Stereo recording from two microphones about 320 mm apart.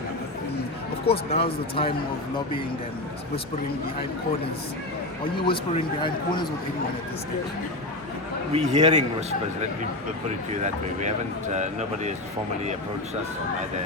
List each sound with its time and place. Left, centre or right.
1.0 s speech: centre
5.4 s speech: centre
8.5 s speech: right
10.2 s speech: right